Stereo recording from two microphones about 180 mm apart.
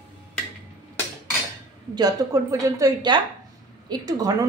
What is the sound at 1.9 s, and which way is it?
A woman's voice, 20° right (ahead or behind).